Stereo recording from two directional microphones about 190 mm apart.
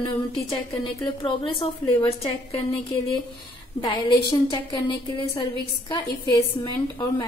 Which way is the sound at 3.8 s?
20° left (ahead or behind).